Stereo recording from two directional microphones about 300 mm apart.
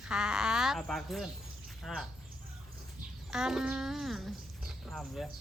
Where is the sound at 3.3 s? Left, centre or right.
Centre.